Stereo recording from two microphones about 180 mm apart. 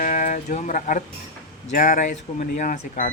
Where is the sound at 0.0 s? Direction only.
45° left (ahead or behind).